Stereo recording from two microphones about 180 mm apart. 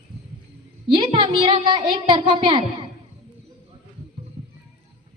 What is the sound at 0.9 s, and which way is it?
A woman's voice, 25° right (ahead or behind).